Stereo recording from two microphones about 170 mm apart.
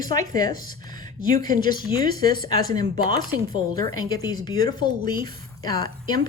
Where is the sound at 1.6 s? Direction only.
25° left (ahead or behind).